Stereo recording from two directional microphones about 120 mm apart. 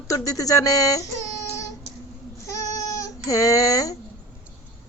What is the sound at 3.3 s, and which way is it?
Speech, 30° left (ahead or behind).